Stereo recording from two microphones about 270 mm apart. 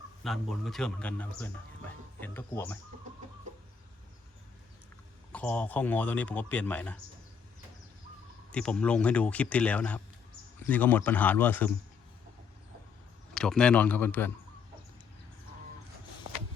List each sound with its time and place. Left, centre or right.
0.2 s speech: centre
5.3 s speech: centre
8.5 s speech: centre
13.3 s speech: centre